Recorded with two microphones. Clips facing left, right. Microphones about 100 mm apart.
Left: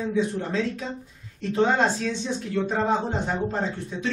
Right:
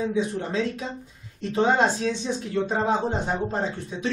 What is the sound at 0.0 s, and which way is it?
A woman's voice, 10° right (ahead or behind).